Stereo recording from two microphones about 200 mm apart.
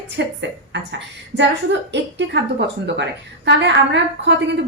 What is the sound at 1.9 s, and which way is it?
Speech, 60° right (ahead or behind).